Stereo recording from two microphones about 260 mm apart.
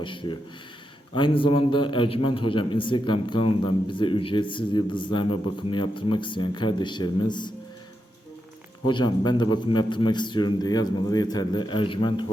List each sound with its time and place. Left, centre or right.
0.0 s a man's voice: centre
8.9 s a man's voice: centre